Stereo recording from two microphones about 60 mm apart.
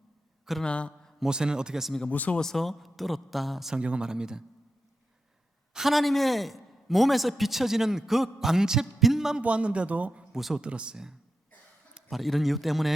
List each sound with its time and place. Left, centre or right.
0.6 s speech: centre
1.2 s speech: centre
2.0 s speech: left
2.4 s a man's voice: centre
3.8 s speech: centre
5.7 s a man's voice: centre
9.4 s speech: centre
10.3 s a man's voice: centre
10.6 s speech: centre
12.0 s a man's voice: centre